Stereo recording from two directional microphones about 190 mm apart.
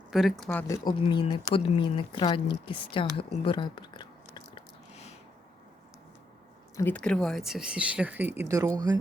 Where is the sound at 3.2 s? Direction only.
30° left (ahead or behind).